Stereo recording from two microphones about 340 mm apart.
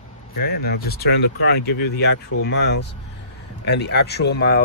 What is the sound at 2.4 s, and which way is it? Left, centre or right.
Speech, left.